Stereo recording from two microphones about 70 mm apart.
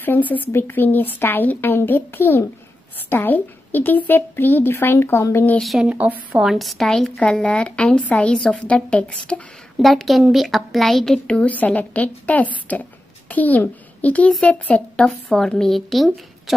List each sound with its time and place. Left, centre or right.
0.0 s a woman's voice: left
5.9 s a woman's voice: right
6.4 s a woman's voice: centre
9.8 s a woman's voice: centre
15.3 s a woman's voice: centre